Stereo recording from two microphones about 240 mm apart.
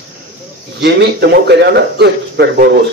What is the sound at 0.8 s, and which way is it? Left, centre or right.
Speech, right.